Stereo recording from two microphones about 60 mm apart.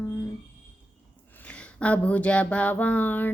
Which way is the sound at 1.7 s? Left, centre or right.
Left.